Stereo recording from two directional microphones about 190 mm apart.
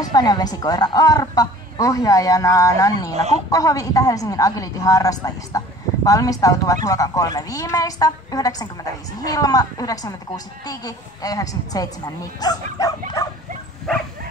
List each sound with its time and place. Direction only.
0.0 s a woman's voice: 20° left (ahead or behind)